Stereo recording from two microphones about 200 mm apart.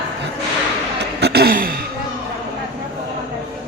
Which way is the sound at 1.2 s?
55° right (ahead or behind).